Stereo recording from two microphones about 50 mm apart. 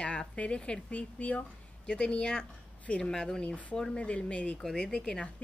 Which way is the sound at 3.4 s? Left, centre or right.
Left.